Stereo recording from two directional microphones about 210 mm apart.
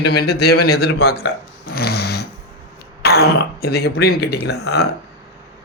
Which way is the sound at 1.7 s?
50° left (ahead or behind).